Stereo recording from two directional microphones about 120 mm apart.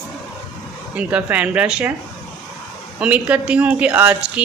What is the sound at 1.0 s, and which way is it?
Speech, 10° right (ahead or behind).